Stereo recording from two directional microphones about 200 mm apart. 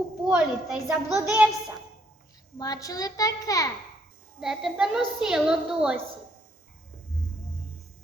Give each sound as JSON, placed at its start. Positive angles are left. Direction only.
{"t": 0.3, "sound": "a woman's voice", "side_deg": -5}
{"t": 2.6, "sound": "a child's voice", "side_deg": 20}
{"t": 4.4, "sound": "a woman's voice", "side_deg": 0}